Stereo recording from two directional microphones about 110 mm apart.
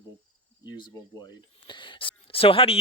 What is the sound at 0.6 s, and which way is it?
Speech, 40° left (ahead or behind).